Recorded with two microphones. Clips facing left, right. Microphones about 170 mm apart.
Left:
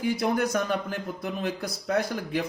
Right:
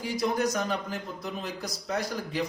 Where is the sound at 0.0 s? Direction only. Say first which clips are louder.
Left 2 dB; 55° left (ahead or behind).